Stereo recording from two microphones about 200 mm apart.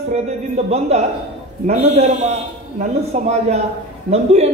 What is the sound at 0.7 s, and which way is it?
A man's voice, 30° right (ahead or behind).